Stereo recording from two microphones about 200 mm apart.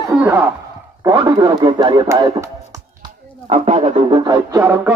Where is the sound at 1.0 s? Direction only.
20° right (ahead or behind).